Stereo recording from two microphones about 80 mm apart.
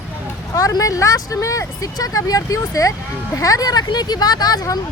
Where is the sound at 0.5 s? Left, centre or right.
Left.